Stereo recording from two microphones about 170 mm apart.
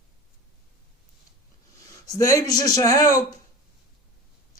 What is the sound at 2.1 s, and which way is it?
Speech, 20° left (ahead or behind).